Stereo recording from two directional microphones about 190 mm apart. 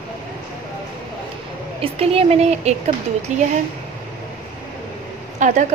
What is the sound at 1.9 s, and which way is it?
A woman's voice, 30° right (ahead or behind).